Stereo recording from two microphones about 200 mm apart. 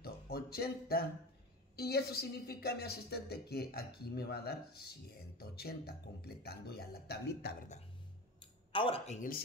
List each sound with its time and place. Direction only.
0.0 s a sound: 50° left (ahead or behind)
1.8 s a woman's voice: 50° left (ahead or behind)
8.4 s speech: 25° left (ahead or behind)